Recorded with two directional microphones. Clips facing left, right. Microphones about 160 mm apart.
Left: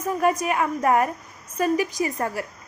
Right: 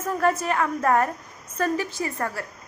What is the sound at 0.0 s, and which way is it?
A woman's voice, 10° left (ahead or behind).